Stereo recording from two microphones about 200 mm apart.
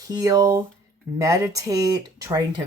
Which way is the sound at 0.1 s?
15° right (ahead or behind).